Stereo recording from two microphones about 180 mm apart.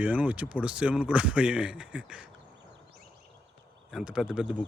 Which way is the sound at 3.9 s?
5° right (ahead or behind).